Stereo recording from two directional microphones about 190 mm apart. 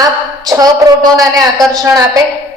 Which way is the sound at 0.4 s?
20° right (ahead or behind).